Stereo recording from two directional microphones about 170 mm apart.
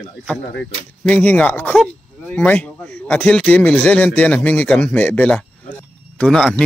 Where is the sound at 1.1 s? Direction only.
10° left (ahead or behind).